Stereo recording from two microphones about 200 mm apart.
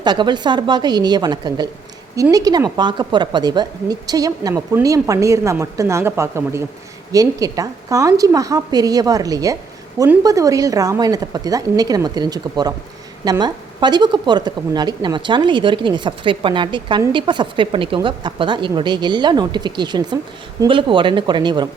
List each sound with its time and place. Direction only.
0.0 s a woman's voice: 20° right (ahead or behind)